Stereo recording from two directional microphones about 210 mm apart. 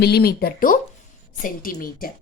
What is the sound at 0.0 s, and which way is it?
A woman's voice, 50° left (ahead or behind).